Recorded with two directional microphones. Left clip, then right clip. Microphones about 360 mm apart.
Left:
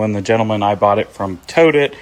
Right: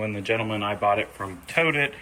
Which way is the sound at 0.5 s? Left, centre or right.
Left.